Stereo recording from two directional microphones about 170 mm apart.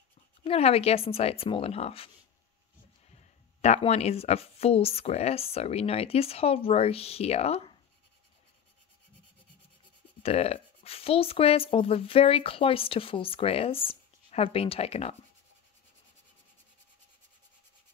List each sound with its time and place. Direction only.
0.4 s speech: 35° left (ahead or behind)
3.2 s speech: 40° left (ahead or behind)
10.2 s speech: 35° left (ahead or behind)